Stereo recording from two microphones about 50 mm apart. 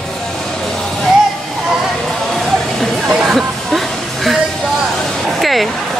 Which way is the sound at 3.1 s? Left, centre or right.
Centre.